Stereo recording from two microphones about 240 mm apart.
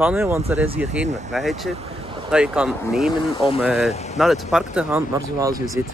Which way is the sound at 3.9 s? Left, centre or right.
Left.